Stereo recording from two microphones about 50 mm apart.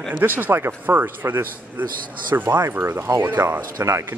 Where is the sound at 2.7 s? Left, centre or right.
Right.